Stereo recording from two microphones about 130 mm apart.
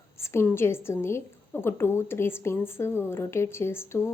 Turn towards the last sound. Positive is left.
turn(degrees=20)  # may be behind; listen again after turning